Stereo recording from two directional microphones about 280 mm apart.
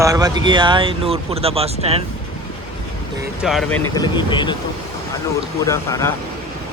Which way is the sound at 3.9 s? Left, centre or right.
Centre.